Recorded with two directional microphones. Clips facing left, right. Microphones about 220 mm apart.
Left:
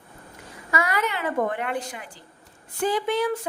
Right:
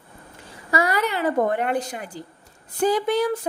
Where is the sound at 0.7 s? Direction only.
35° right (ahead or behind).